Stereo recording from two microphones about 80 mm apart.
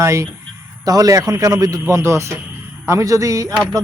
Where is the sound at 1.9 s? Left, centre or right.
Right.